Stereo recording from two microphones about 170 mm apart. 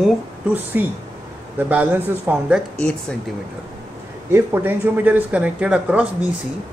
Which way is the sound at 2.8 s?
5° left (ahead or behind).